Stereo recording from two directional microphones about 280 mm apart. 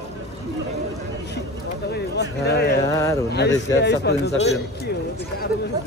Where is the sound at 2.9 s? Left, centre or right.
Centre.